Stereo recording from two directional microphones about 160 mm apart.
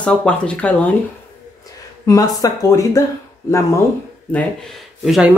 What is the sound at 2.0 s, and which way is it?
Speech, 20° left (ahead or behind).